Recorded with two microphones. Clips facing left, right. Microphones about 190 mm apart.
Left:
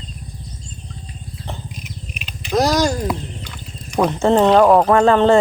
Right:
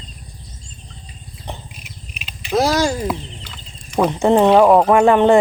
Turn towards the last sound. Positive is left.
turn(degrees=-15)  # may be behind; listen again after turning